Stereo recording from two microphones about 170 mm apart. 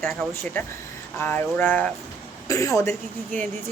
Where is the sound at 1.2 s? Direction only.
10° left (ahead or behind).